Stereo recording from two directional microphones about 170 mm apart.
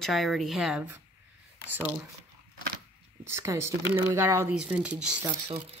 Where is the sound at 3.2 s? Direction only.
15° right (ahead or behind).